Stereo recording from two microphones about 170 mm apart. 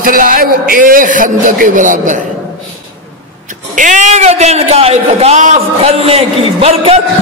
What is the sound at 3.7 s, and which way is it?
A man's voice, 50° right (ahead or behind).